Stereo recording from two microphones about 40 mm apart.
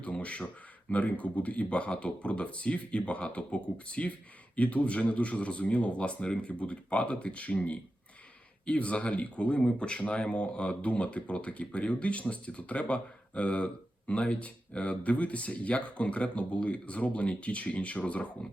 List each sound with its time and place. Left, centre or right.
0.0 s speech: left